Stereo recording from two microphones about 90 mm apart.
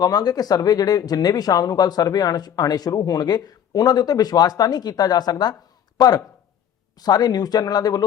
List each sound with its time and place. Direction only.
0.0 s speech: 45° left (ahead or behind)